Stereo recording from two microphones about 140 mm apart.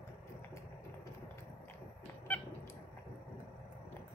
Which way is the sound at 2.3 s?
10° left (ahead or behind).